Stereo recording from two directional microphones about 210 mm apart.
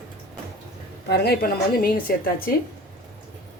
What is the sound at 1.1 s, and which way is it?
A woman's voice, 45° left (ahead or behind).